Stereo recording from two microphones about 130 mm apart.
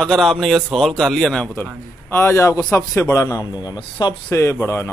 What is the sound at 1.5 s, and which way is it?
A man's voice, 15° left (ahead or behind).